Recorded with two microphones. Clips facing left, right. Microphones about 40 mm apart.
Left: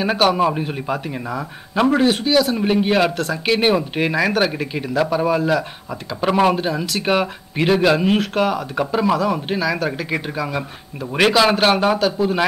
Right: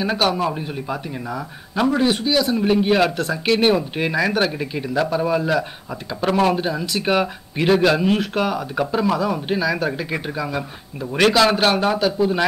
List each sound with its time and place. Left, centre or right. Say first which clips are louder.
0.0 s a man's voice: left 3 dB; centre